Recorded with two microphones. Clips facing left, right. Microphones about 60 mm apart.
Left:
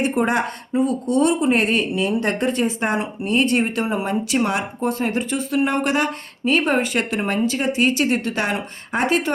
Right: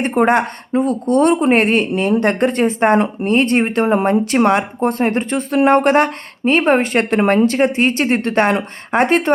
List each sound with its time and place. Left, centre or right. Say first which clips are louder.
0.0 s speech: right 5 dB; right